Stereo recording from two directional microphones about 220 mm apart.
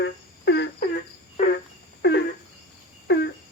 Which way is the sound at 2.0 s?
50° left (ahead or behind).